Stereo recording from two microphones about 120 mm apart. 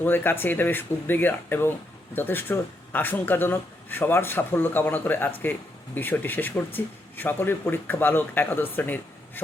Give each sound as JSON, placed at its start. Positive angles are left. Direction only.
{"t": 0.0, "sound": "speech", "side_deg": 15}